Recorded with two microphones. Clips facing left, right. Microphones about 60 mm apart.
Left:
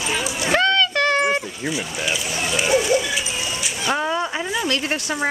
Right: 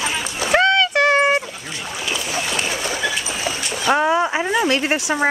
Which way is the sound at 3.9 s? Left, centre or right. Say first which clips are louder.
Right 6 dB; right.